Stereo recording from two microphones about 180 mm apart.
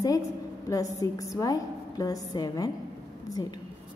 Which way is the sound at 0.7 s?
20° left (ahead or behind).